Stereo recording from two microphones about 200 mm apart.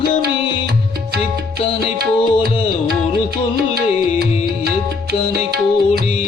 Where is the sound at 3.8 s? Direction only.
50° right (ahead or behind).